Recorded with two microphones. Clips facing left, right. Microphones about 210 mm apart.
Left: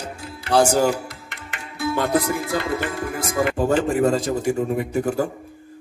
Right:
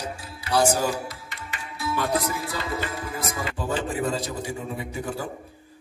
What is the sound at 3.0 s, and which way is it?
A man's voice, 60° left (ahead or behind).